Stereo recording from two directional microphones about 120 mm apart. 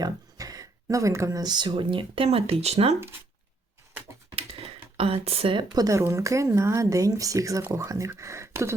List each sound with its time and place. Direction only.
0.0 s speech: 30° right (ahead or behind); by 2.9 s 60° right (ahead or behind)
4.9 s speech: 55° right (ahead or behind); by 8.7 s 25° right (ahead or behind)